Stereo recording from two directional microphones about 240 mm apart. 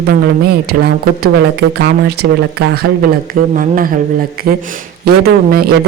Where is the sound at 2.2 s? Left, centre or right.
Right.